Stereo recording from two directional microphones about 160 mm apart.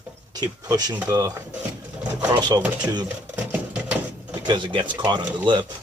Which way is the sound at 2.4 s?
25° right (ahead or behind).